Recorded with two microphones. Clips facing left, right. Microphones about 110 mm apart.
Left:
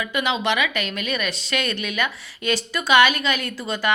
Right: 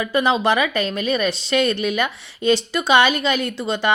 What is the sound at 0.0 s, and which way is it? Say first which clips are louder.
A woman's voice: right 5 dB; 35° right (ahead or behind).